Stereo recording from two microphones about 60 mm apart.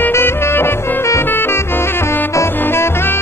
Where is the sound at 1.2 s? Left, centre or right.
Left.